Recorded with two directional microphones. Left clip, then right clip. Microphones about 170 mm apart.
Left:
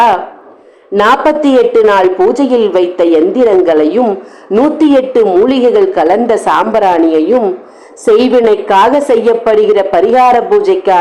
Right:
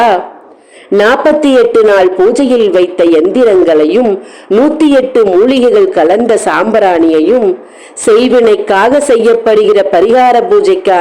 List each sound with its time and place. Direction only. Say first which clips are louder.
0.9 s a woman's voice: right 1 dB; 30° right (ahead or behind)